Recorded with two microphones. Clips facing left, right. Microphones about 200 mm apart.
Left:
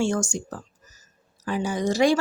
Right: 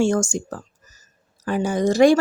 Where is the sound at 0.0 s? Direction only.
50° right (ahead or behind).